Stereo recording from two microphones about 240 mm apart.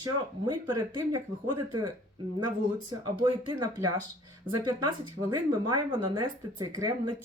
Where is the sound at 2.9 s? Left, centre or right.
Centre.